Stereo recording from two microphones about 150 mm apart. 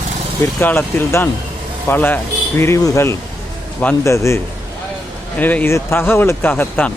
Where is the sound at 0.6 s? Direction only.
15° left (ahead or behind).